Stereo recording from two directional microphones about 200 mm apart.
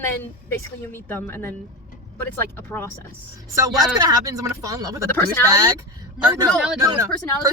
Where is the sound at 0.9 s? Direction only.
10° left (ahead or behind).